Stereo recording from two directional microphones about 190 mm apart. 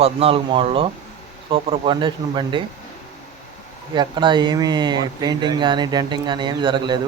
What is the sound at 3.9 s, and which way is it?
Speech, 25° right (ahead or behind).